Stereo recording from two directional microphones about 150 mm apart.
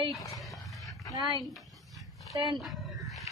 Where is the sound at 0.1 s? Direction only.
20° left (ahead or behind).